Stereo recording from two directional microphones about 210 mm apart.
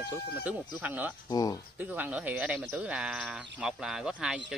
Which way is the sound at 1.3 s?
20° left (ahead or behind).